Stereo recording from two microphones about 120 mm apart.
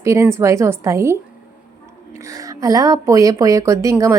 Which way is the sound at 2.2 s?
30° right (ahead or behind).